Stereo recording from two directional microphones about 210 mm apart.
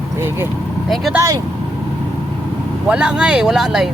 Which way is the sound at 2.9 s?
5° right (ahead or behind).